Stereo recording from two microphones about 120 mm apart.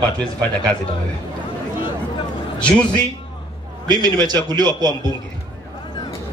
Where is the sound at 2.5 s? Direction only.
10° left (ahead or behind).